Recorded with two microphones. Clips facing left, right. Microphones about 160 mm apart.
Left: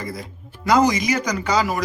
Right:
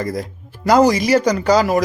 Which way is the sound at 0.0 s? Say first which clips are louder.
Right 8 dB; 40° right (ahead or behind).